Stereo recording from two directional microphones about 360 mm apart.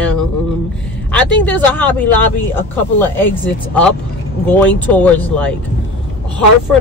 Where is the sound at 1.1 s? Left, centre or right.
Centre.